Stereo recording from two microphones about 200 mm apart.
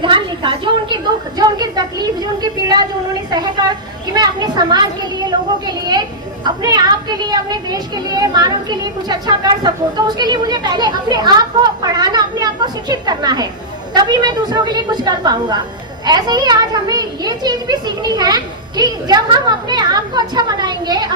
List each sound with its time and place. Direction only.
0.0 s a child's voice: 25° right (ahead or behind)